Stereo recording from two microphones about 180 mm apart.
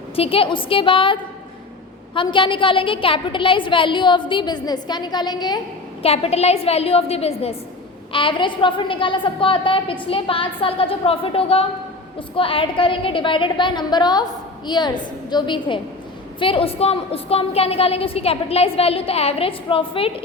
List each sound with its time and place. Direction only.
0.2 s a woman's voice: 30° left (ahead or behind)
6.0 s a woman's voice: 35° left (ahead or behind)